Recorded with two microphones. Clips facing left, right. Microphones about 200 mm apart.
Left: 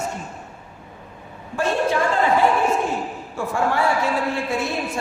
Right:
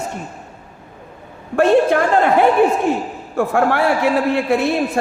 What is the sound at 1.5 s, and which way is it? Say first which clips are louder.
Speech: right 8 dB; 60° right (ahead or behind).